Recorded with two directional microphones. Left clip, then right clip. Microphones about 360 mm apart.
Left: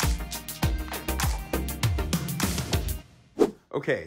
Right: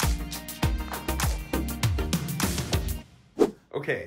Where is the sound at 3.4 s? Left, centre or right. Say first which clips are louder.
Even; centre.